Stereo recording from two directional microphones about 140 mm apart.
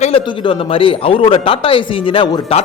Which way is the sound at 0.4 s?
40° left (ahead or behind).